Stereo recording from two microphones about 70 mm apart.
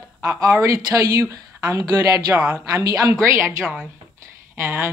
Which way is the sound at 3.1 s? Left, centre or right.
Right.